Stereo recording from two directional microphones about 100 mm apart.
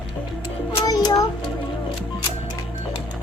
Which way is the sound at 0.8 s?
45° left (ahead or behind).